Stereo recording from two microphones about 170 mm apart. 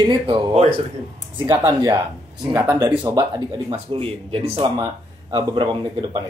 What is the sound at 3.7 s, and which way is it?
Speech, 35° right (ahead or behind).